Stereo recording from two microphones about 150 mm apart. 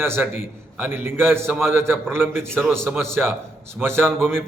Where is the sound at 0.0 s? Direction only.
15° right (ahead or behind).